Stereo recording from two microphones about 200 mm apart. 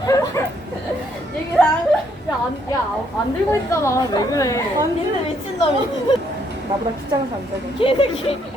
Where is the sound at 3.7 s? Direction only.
15° left (ahead or behind).